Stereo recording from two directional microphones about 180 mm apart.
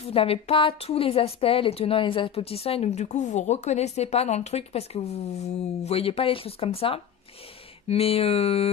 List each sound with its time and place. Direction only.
0.0 s a woman's voice: 35° left (ahead or behind)